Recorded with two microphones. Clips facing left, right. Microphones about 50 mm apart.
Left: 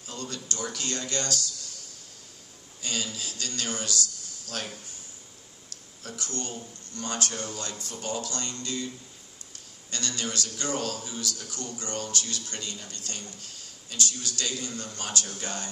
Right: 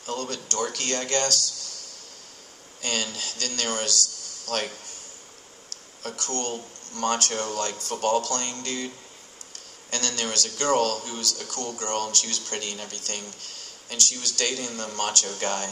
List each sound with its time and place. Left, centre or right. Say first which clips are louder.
0.0 s a man's voice: right 6 dB; right
2.8 s a man's voice: right 4 dB; right
6.0 s a man's voice: right 6 dB; right